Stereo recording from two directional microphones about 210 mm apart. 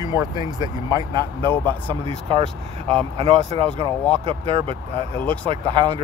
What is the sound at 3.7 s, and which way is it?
Speech, 5° left (ahead or behind).